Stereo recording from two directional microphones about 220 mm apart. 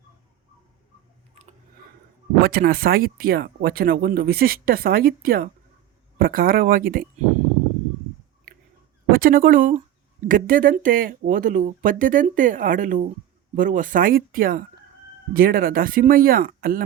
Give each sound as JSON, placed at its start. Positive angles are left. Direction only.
{"t": 2.4, "sound": "speech", "side_deg": -45}
{"t": 9.1, "sound": "speech", "side_deg": -40}